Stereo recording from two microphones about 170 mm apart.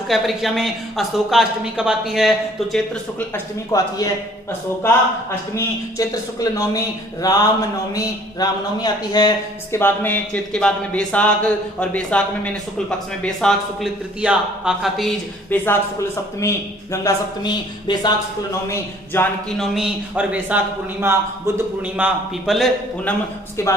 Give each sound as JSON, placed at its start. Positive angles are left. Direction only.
{"t": 0.1, "sound": "speech", "side_deg": 0}
{"t": 5.5, "sound": "a man's voice", "side_deg": 20}
{"t": 9.7, "sound": "speech", "side_deg": 10}
{"t": 15.4, "sound": "speech", "side_deg": 15}
{"t": 18.7, "sound": "speech", "side_deg": 10}
{"t": 19.5, "sound": "speech", "side_deg": 0}
{"t": 23.6, "sound": "speech", "side_deg": 15}